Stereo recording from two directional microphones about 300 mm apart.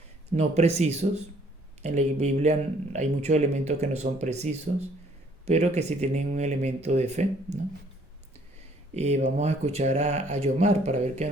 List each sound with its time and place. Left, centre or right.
0.3 s speech: right
9.0 s speech: right